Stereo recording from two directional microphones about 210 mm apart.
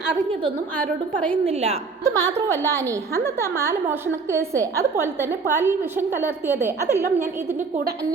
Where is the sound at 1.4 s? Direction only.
30° right (ahead or behind).